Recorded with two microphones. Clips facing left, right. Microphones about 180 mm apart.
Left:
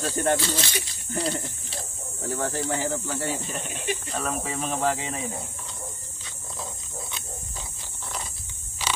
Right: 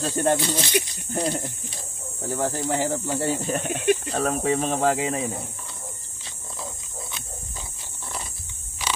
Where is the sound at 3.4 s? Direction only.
55° right (ahead or behind).